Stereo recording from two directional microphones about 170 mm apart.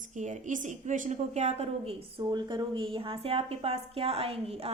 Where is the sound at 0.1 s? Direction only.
45° right (ahead or behind).